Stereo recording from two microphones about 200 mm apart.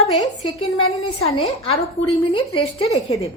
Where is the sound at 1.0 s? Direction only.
30° left (ahead or behind).